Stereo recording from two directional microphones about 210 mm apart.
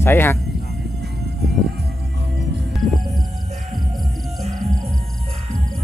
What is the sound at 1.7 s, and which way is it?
Music, 50° right (ahead or behind).